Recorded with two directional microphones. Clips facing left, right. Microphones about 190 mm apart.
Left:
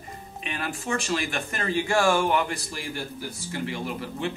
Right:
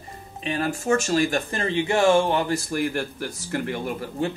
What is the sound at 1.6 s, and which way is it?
Speech, 20° right (ahead or behind).